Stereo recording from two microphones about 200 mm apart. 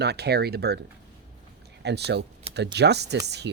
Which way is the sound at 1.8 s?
55° right (ahead or behind).